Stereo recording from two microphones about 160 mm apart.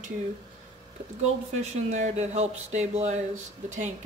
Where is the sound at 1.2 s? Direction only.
45° right (ahead or behind).